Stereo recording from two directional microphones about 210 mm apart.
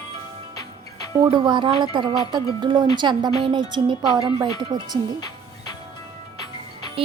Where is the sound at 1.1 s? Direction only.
25° right (ahead or behind).